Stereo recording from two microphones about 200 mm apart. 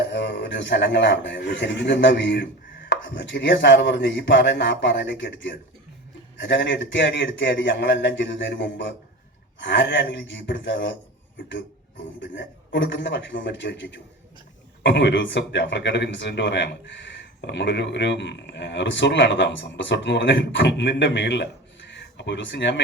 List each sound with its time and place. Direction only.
0.1 s a man's voice: 60° left (ahead or behind)
12.2 s speech: 65° left (ahead or behind)